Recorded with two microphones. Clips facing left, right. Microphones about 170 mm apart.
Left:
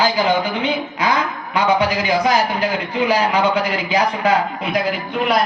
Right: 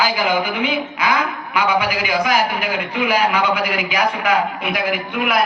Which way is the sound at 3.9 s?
30° left (ahead or behind).